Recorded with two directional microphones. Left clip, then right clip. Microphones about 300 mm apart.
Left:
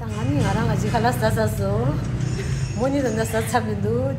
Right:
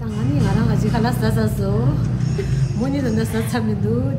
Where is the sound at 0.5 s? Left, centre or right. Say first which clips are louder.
Even; centre.